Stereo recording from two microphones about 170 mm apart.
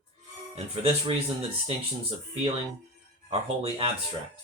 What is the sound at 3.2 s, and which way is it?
Speech, 35° right (ahead or behind).